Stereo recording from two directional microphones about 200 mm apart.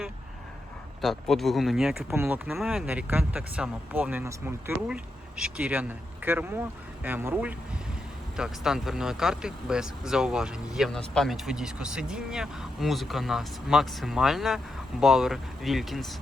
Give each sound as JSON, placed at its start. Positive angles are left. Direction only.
{"t": 1.0, "sound": "speech", "side_deg": 0}
{"t": 2.0, "sound": "speech", "side_deg": -10}